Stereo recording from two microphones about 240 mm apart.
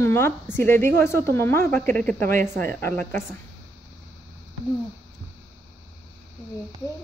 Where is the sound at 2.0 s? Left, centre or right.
Right.